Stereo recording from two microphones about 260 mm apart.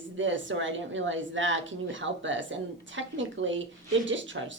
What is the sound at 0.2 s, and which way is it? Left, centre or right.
A woman's voice, right.